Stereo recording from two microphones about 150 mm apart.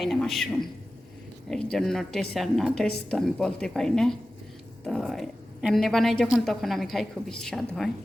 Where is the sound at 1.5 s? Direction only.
5° left (ahead or behind).